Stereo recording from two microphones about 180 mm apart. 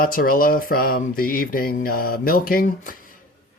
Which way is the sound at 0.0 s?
50° left (ahead or behind).